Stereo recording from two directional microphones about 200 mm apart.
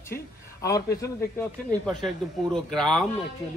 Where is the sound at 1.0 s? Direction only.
10° left (ahead or behind).